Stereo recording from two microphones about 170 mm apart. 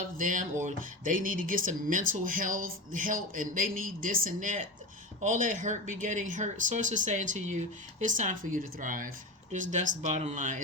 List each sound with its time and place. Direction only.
0.2 s speech: 50° right (ahead or behind)